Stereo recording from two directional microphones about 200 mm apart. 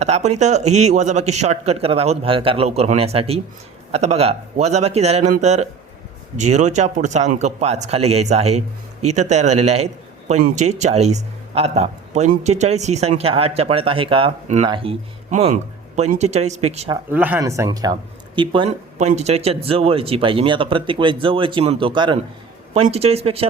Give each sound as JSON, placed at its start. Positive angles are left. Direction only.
{"t": 0.0, "sound": "speech", "side_deg": -35}
{"t": 16.9, "sound": "speech", "side_deg": -10}
{"t": 18.9, "sound": "speech", "side_deg": -35}